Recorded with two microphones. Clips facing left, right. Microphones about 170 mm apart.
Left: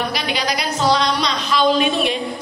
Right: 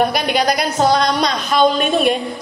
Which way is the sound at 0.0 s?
50° right (ahead or behind).